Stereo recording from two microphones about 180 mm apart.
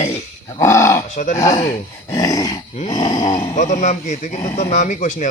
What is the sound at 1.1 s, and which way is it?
Speech, 40° left (ahead or behind).